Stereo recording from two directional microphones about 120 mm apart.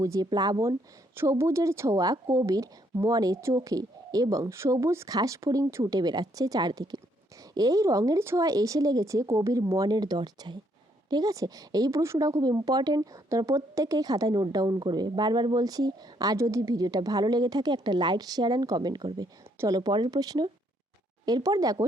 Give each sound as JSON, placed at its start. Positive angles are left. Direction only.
{"t": 0.0, "sound": "a woman's voice", "side_deg": -30}